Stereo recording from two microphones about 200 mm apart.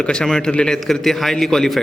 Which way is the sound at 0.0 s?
5° left (ahead or behind).